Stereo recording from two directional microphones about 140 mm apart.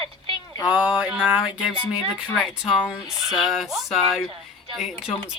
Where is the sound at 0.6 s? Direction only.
10° right (ahead or behind).